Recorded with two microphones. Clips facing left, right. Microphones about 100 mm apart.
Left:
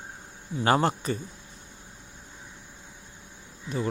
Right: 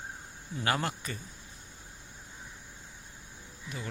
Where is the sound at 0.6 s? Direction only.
30° left (ahead or behind).